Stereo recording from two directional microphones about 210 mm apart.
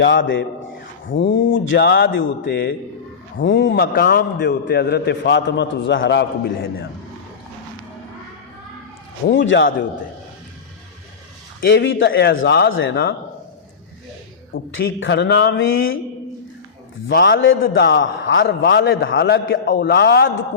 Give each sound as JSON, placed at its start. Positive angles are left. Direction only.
{"t": 0.0, "sound": "a man's voice", "side_deg": 60}
{"t": 9.3, "sound": "a man's voice", "side_deg": 60}
{"t": 11.6, "sound": "speech", "side_deg": 55}
{"t": 14.5, "sound": "a man's voice", "side_deg": 55}
{"t": 17.1, "sound": "a man's voice", "side_deg": 55}
{"t": 17.6, "sound": "a man's voice", "side_deg": 55}